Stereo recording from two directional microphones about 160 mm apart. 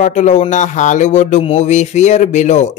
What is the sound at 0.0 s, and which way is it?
Speech, 50° left (ahead or behind).